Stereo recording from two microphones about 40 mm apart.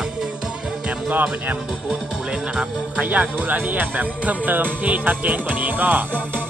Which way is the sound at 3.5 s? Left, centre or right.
Right.